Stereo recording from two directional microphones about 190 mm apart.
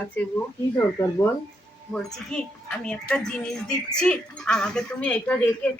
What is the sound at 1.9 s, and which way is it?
A woman's voice, 5° left (ahead or behind).